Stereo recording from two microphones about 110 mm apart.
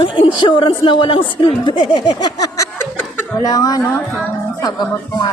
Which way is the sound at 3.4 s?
35° left (ahead or behind).